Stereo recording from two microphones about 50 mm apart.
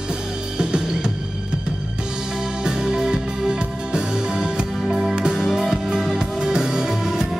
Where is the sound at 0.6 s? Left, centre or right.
Centre.